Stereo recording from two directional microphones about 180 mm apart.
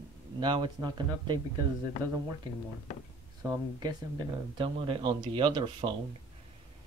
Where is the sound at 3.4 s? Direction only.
20° right (ahead or behind).